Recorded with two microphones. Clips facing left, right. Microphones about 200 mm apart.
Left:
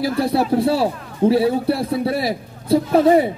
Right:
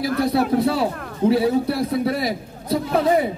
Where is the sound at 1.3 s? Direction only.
30° left (ahead or behind).